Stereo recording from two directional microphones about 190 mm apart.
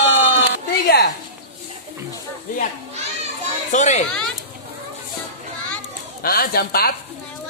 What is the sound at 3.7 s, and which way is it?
Speech, 40° left (ahead or behind).